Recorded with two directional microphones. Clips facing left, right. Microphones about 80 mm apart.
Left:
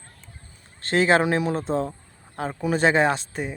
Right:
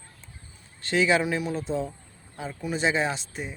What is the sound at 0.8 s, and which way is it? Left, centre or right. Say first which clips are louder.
Speech: left 4 dB; left.